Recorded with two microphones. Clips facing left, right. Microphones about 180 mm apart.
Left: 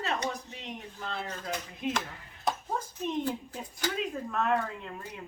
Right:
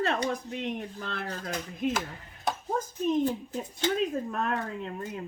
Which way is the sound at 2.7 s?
40° right (ahead or behind).